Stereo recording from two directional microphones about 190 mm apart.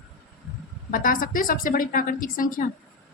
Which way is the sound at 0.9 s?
45° left (ahead or behind).